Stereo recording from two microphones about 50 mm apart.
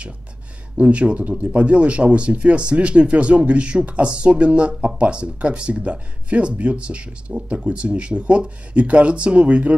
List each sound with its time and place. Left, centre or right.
0.7 s speech: right